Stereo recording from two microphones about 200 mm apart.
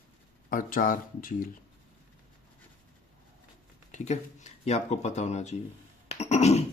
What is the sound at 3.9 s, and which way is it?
Speech, 35° left (ahead or behind).